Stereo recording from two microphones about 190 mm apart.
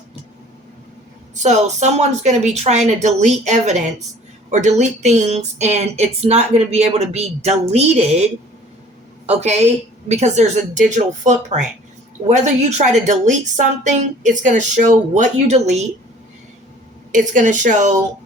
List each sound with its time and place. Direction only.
1.4 s speech: 35° right (ahead or behind)
9.2 s speech: 35° right (ahead or behind)
17.1 s speech: 40° right (ahead or behind)